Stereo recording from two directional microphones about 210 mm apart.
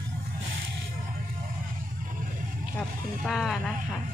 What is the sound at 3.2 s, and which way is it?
Speech, centre (ahead or behind).